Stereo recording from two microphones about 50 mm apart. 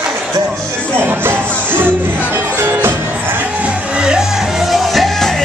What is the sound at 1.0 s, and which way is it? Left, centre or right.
Music, right.